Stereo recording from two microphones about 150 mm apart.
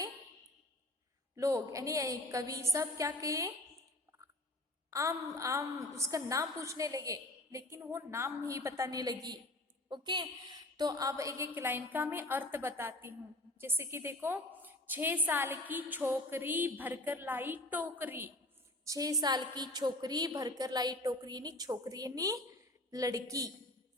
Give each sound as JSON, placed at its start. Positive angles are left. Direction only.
{"t": 1.4, "sound": "a woman's voice", "side_deg": -20}
{"t": 4.9, "sound": "a woman's voice", "side_deg": -20}
{"t": 18.9, "sound": "a woman's voice", "side_deg": -25}